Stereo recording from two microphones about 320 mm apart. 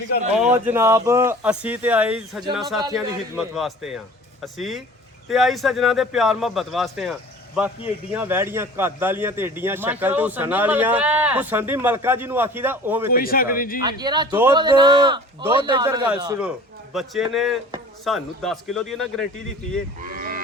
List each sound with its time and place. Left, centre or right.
0.3 s a man's voice: centre
13.1 s speech: left
13.8 s a man's voice: centre
20.0 s cattle: right